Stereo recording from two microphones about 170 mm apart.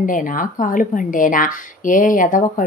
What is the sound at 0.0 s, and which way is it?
A woman's voice, 50° left (ahead or behind).